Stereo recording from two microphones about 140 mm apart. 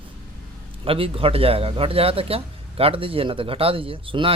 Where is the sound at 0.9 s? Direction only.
40° right (ahead or behind).